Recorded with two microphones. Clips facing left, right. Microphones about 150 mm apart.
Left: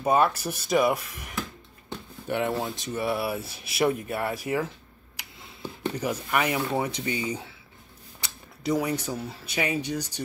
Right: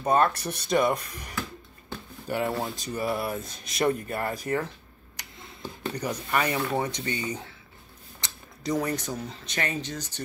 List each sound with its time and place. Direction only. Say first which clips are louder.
0.0 s speech: left 1 dB; 5° left (ahead or behind)